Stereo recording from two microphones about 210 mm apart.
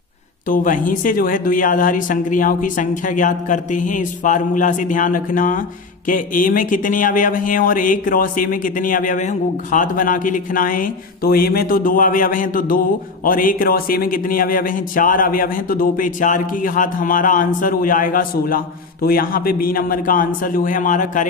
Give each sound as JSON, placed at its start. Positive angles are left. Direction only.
{"t": 0.5, "sound": "speech", "side_deg": 40}